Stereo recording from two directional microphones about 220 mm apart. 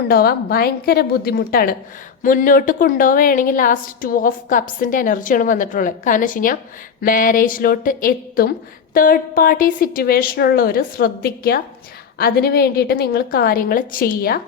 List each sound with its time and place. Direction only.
0.1 s a woman's voice: 45° left (ahead or behind)